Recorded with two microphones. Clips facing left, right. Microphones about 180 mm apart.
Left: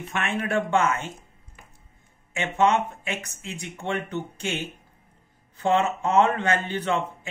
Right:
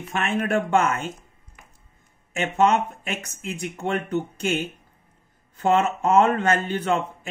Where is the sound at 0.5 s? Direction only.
45° right (ahead or behind).